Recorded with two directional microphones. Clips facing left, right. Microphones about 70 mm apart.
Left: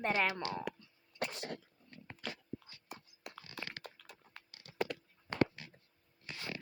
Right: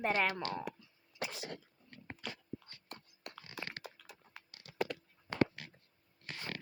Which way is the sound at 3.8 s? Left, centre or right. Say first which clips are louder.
Right 1 dB; centre.